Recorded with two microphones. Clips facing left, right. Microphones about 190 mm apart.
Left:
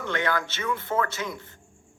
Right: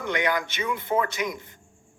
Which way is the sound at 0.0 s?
15° right (ahead or behind).